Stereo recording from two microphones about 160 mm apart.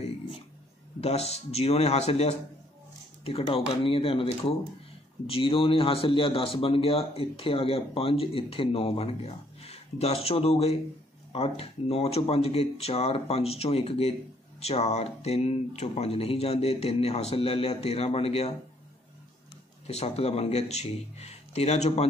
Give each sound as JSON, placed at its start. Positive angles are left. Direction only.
{"t": 1.0, "sound": "a man's voice", "side_deg": 40}
{"t": 19.9, "sound": "a man's voice", "side_deg": 40}